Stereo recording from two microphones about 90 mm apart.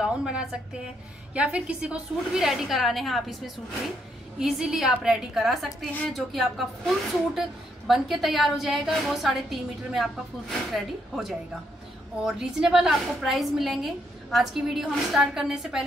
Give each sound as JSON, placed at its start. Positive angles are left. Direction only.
{"t": 0.0, "sound": "a woman's voice", "side_deg": -10}
{"t": 10.7, "sound": "a woman's voice", "side_deg": 0}